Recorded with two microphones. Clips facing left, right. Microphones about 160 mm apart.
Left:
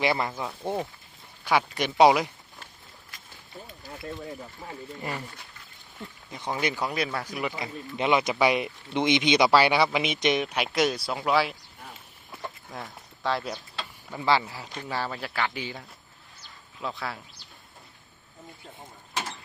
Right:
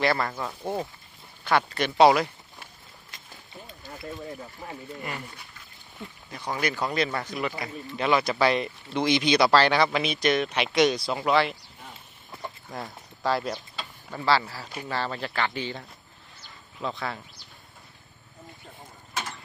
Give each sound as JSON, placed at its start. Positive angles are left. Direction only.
{"t": 0.0, "sound": "speech", "side_deg": 15}
{"t": 6.3, "sound": "speech", "side_deg": 20}
{"t": 6.7, "sound": "speech", "side_deg": 10}
{"t": 13.2, "sound": "a sound", "side_deg": 0}
{"t": 14.2, "sound": "speech", "side_deg": 15}